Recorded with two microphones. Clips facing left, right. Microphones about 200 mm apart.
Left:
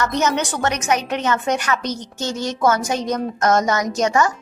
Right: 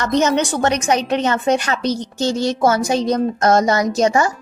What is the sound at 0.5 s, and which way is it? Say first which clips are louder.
Speech: right 3 dB; 30° right (ahead or behind).